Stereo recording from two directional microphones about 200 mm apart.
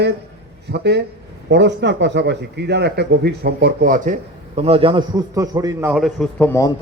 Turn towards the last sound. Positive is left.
turn(degrees=15)  # may be behind; listen again after turning